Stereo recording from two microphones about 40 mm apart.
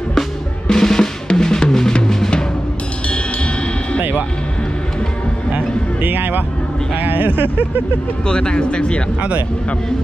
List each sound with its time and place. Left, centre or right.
0.7 s drum: centre
2.0 s music: centre
6.0 s music: right
7.0 s a sound: right
8.3 s speech: left